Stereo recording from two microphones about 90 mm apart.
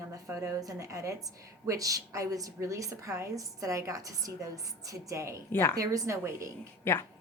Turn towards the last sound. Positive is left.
turn(degrees=30)  # may be behind; listen again after turning